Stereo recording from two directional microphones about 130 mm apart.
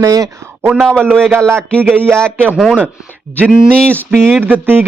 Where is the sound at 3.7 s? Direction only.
10° left (ahead or behind).